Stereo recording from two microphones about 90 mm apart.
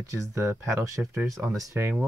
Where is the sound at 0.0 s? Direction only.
35° right (ahead or behind).